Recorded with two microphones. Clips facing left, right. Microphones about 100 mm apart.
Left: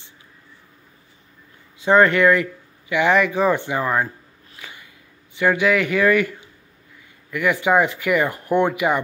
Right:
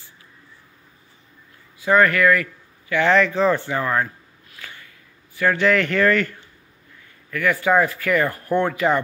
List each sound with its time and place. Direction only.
1.8 s speech: 25° left (ahead or behind)
4.6 s a sound: 15° left (ahead or behind)
7.2 s speech: 15° left (ahead or behind)